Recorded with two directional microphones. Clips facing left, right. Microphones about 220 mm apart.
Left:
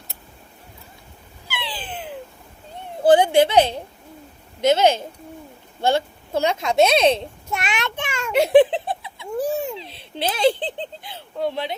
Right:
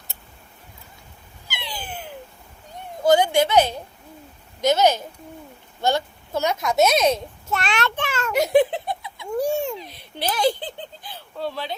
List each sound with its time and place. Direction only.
1.5 s a sound: 30° left (ahead or behind)
3.0 s speech: 30° left (ahead or behind)
7.5 s a child's voice: centre (ahead or behind)
8.3 s giggle: 30° left (ahead or behind)
9.4 s a child's voice: 5° left (ahead or behind)
9.7 s speech: 25° left (ahead or behind)